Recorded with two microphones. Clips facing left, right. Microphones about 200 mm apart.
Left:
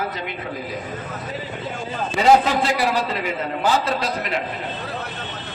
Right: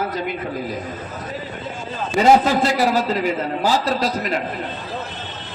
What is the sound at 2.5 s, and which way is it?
Speech, 40° right (ahead or behind).